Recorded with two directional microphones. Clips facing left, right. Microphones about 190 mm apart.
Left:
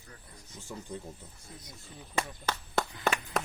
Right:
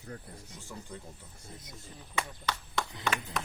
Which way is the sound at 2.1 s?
45° left (ahead or behind).